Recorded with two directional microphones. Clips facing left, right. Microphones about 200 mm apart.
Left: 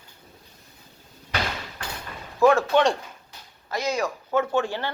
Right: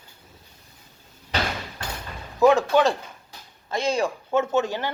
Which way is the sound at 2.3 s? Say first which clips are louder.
Right 1 dB; 15° right (ahead or behind).